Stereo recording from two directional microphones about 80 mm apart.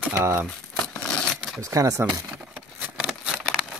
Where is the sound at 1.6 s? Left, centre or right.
Right.